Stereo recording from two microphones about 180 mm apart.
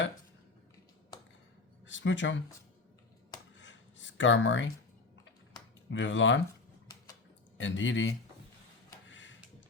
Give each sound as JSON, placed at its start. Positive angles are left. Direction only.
{"t": 1.9, "sound": "speech", "side_deg": 90}
{"t": 3.6, "sound": "writing", "side_deg": 90}
{"t": 5.9, "sound": "speech", "side_deg": 90}
{"t": 7.6, "sound": "speech", "side_deg": 90}
{"t": 9.0, "sound": "a sound", "side_deg": 90}